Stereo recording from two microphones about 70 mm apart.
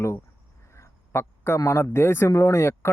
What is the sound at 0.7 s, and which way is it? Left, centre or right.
A man's voice, left.